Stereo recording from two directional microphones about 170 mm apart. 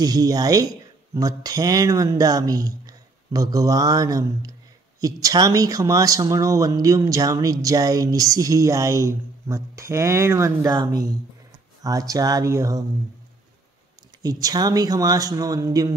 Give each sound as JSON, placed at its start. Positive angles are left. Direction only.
{"t": 0.0, "sound": "speech", "side_deg": -20}
{"t": 14.2, "sound": "speech", "side_deg": -20}